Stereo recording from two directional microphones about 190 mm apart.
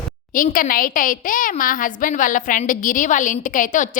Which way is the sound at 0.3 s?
45° left (ahead or behind).